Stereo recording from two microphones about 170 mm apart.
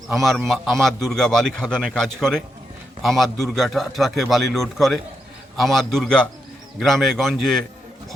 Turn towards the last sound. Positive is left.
turn(degrees=0)  # may be behind; listen again after turning